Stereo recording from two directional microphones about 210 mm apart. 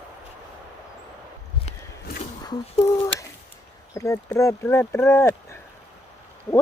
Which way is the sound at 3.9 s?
15° left (ahead or behind).